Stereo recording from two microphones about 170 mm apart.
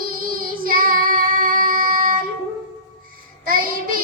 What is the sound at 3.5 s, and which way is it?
Child singing, 55° right (ahead or behind).